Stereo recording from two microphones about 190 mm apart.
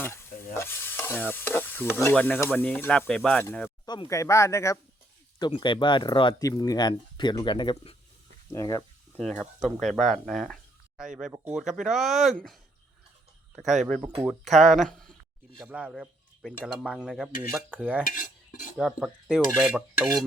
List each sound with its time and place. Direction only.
0.0 s stir: 15° left (ahead or behind)
3.8 s stir: 20° left (ahead or behind)
5.4 s speech: 25° left (ahead or behind)
8.5 s stir: 15° left (ahead or behind)
9.1 s speech: 5° left (ahead or behind)
13.6 s speech: centre (ahead or behind)
17.7 s cutlery: 10° right (ahead or behind)
18.1 s cutlery: 45° left (ahead or behind)
18.8 s speech: 5° right (ahead or behind)